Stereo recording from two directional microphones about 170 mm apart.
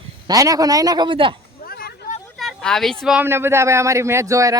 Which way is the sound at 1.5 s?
65° left (ahead or behind).